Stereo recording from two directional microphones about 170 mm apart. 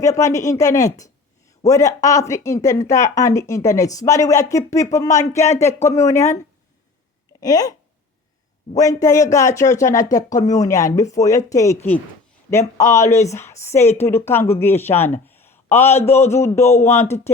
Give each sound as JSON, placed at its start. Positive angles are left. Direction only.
{"t": 0.0, "sound": "speech", "side_deg": 20}
{"t": 7.4, "sound": "a man's voice", "side_deg": 20}